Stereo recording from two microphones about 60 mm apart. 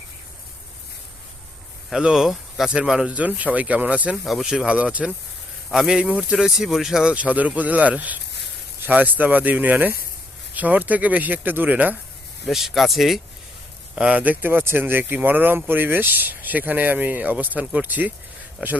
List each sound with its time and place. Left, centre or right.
1.9 s speech: centre
4.2 s speech: centre
4.4 s speech: centre
5.7 s speech: centre
6.0 s speech: right
6.3 s speech: centre
7.1 s speech: right
12.5 s speech: centre
13.9 s speech: right